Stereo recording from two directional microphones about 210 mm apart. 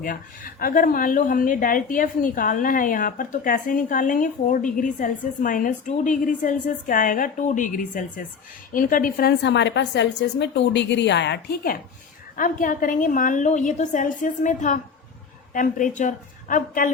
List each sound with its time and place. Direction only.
0.0 s a woman's voice: 40° left (ahead or behind)